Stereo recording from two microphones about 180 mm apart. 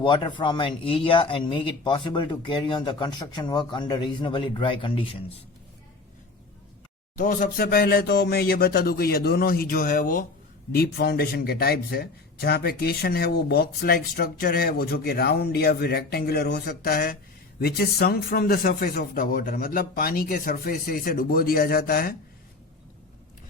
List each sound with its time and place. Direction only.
0.0 s speech: 25° left (ahead or behind)
7.2 s speech: 50° left (ahead or behind)